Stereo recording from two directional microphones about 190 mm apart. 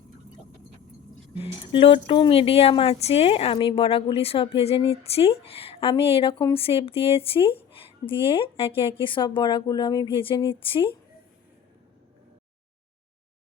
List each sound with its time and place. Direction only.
1.4 s speech: 30° left (ahead or behind)